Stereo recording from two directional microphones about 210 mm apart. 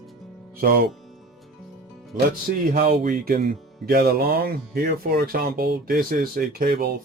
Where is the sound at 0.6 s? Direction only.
45° right (ahead or behind).